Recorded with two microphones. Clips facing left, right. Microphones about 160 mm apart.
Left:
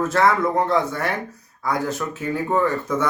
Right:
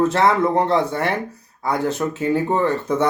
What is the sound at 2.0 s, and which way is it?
Speech, 30° right (ahead or behind).